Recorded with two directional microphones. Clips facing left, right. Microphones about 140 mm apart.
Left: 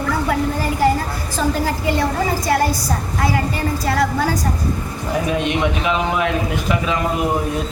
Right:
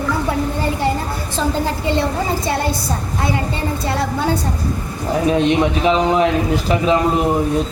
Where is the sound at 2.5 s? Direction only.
25° right (ahead or behind).